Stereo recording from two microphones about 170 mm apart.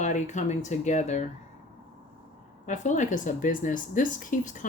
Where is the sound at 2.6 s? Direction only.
45° left (ahead or behind).